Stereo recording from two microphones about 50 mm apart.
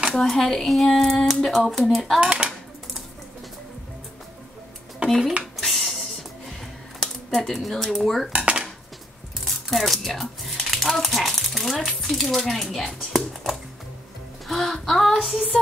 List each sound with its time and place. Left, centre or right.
0.1 s speech: centre
2.1 s dishes: right
5.0 s dishes: right
5.4 s music: centre
7.2 s speech: centre
9.4 s a sound: centre
15.2 s speech: centre